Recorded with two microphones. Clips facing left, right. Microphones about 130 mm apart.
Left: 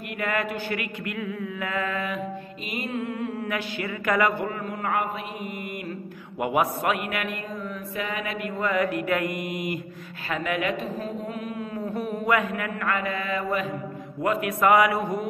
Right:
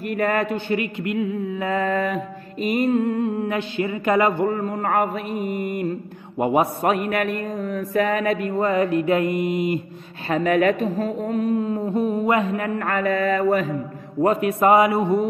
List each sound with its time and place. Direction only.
0.2 s a man's voice: 35° right (ahead or behind)
3.3 s mantra: 25° right (ahead or behind)
4.6 s a man's voice: 40° right (ahead or behind)
10.3 s a man's voice: 40° right (ahead or behind)
14.2 s mantra: 30° right (ahead or behind)